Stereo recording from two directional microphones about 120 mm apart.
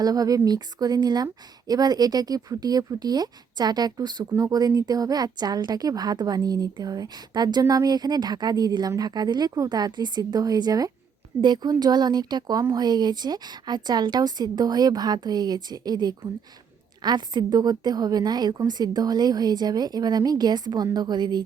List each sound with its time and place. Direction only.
0.0 s speech: 30° right (ahead or behind)